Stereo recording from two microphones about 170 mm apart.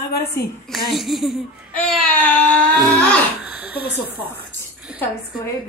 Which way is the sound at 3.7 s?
70° left (ahead or behind).